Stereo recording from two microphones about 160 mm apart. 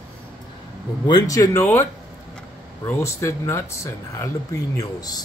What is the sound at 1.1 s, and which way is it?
Speech, 25° left (ahead or behind).